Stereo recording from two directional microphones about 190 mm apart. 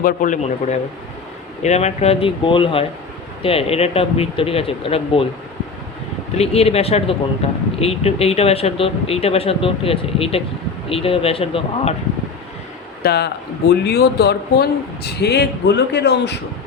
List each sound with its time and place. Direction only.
0.0 s speech: 45° left (ahead or behind)
6.3 s speech: 35° left (ahead or behind)
13.0 s speech: 60° left (ahead or behind)